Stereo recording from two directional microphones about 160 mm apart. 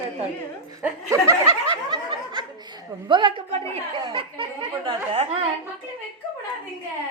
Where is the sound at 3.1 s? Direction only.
30° right (ahead or behind).